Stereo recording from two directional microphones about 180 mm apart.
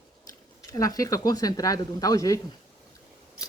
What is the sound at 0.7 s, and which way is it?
Speech, 20° left (ahead or behind).